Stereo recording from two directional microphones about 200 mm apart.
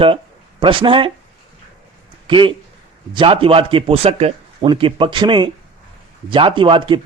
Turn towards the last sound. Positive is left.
turn(degrees=-25)  # may be behind; listen again after turning